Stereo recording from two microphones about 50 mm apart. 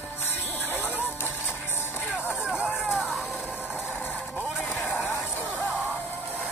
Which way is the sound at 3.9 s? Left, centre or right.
Left.